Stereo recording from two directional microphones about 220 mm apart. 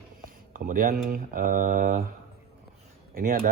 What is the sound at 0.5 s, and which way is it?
Speech, 40° right (ahead or behind).